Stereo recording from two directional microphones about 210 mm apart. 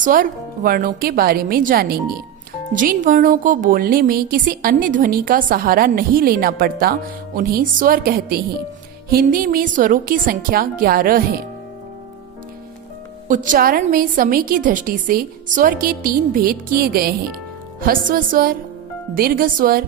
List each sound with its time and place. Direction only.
0.0 s speech: 40° right (ahead or behind)
13.2 s speech: 40° right (ahead or behind)